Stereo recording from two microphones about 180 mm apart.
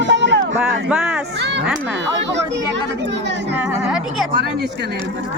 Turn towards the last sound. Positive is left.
turn(degrees=-5)  # may be behind; listen again after turning